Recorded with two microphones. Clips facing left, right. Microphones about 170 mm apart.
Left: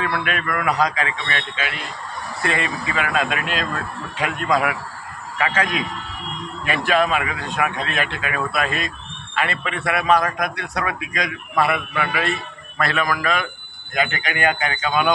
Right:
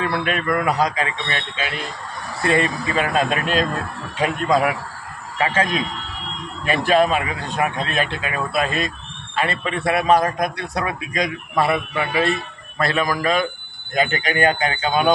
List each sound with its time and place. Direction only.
0.0 s a man's voice: 35° right (ahead or behind)